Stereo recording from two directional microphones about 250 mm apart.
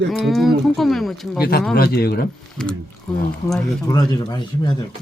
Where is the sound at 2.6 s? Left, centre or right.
Centre.